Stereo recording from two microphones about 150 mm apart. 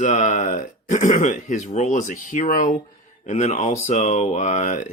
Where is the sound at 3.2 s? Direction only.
50° left (ahead or behind).